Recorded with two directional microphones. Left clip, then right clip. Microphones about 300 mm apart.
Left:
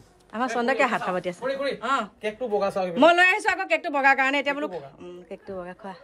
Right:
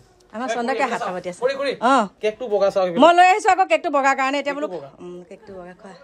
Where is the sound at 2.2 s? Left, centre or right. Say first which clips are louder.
Right 6 dB; right.